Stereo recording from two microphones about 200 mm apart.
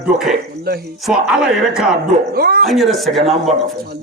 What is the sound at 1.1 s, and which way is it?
Speech, 5° right (ahead or behind).